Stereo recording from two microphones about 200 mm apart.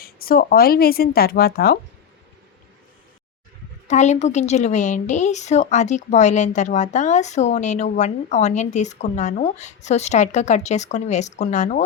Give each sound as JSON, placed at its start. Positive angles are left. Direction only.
{"t": 0.0, "sound": "speech", "side_deg": 50}
{"t": 3.8, "sound": "a woman's voice", "side_deg": 35}